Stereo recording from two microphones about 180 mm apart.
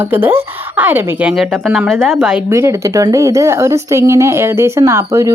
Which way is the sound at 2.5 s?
15° right (ahead or behind).